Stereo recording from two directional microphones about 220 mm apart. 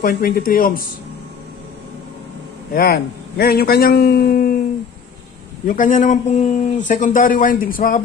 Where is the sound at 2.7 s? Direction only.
45° left (ahead or behind).